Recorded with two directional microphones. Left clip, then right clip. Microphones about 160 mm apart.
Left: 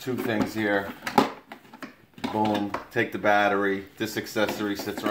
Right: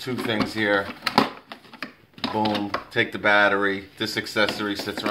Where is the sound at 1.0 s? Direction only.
Centre (ahead or behind).